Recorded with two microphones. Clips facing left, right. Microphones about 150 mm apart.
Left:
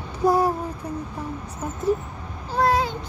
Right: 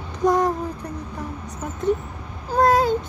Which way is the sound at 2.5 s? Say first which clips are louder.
Right 4 dB; 45° right (ahead or behind).